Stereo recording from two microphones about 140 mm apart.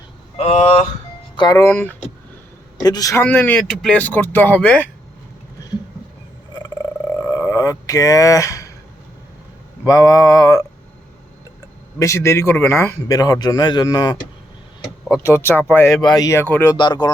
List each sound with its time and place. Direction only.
0.3 s speech: 50° left (ahead or behind)
1.4 s speech: 25° left (ahead or behind)
1.7 s speech: 10° left (ahead or behind)
2.8 s a man's voice: 25° left (ahead or behind)
3.2 s speech: 10° left (ahead or behind)
7.1 s a sound: 20° left (ahead or behind)
9.8 s a man's voice: 25° left (ahead or behind)
11.9 s a man's voice: 20° left (ahead or behind)
15.2 s a man's voice: 20° left (ahead or behind)
16.0 s a man's voice: 30° left (ahead or behind)
16.7 s speech: 30° left (ahead or behind)